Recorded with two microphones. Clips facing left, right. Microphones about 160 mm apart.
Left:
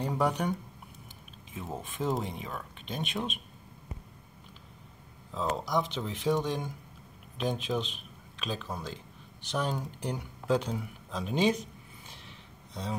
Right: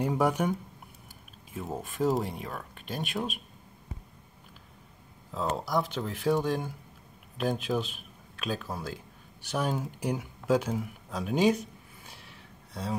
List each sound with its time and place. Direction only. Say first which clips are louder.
0.0 s speech: right 3 dB; 5° right (ahead or behind)
5.6 s speech: right 1 dB; 5° right (ahead or behind)
12.1 s a sound: even; 5° right (ahead or behind)